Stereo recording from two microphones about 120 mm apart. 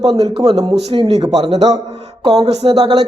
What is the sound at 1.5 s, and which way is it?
Speech, 65° right (ahead or behind).